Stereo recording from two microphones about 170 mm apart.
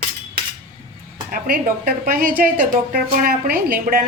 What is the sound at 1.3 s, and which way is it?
A woman's voice, 60° right (ahead or behind).